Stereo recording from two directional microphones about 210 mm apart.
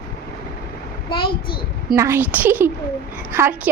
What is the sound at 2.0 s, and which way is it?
A woman's voice, 10° right (ahead or behind).